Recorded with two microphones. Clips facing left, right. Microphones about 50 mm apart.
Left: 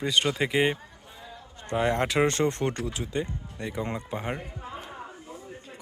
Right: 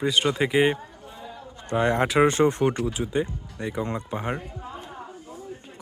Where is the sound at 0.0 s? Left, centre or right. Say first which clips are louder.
Right 3 dB; centre.